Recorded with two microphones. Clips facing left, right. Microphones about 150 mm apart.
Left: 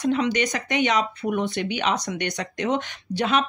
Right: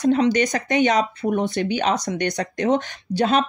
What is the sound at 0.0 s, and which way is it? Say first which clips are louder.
Speech: right 4 dB; 40° right (ahead or behind).